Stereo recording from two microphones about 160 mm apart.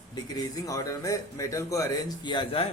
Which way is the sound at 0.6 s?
20° left (ahead or behind).